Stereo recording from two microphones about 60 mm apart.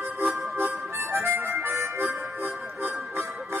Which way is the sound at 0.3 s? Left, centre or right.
Right.